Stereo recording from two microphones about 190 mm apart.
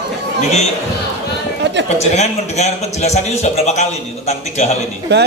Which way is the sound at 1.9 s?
35° left (ahead or behind).